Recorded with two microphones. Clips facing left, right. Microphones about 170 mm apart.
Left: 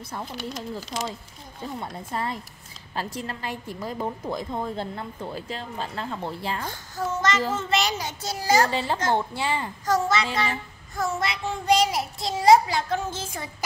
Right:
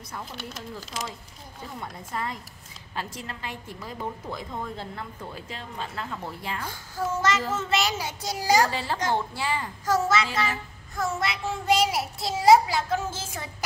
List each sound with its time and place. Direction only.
0.4 s child singing: centre (ahead or behind)
1.8 s a woman's voice: 30° left (ahead or behind)
6.7 s a child's voice: 10° right (ahead or behind)
7.5 s child singing: 5° right (ahead or behind)
8.2 s a child's voice: 15° right (ahead or behind)
8.6 s a woman's voice: 20° left (ahead or behind)
9.8 s child singing: 5° right (ahead or behind)